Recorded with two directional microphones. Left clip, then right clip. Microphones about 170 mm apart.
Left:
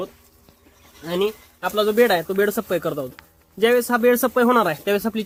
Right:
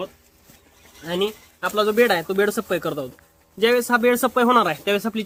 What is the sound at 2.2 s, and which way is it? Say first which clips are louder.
Speech: even; 15° right (ahead or behind).